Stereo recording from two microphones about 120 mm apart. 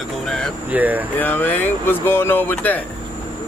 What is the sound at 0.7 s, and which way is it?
Speech, 15° right (ahead or behind).